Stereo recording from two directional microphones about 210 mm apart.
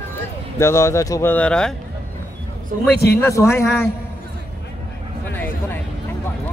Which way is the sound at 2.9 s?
50° left (ahead or behind).